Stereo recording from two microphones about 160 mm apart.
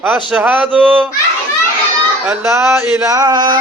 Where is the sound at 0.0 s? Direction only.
10° right (ahead or behind).